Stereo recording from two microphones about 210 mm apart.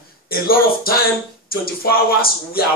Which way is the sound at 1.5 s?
45° left (ahead or behind).